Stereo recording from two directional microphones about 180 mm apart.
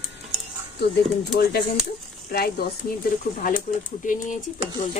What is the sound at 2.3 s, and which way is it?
Speech, 60° left (ahead or behind).